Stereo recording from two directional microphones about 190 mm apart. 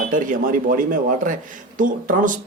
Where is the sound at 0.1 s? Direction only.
45° right (ahead or behind).